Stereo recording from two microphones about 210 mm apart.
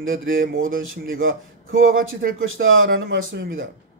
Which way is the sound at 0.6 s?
75° right (ahead or behind).